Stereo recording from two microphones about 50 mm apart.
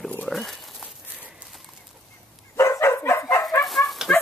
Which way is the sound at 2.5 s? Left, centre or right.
Left.